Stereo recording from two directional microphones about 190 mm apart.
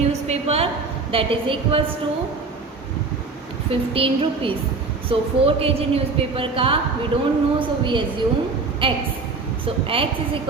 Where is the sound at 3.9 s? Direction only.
30° right (ahead or behind).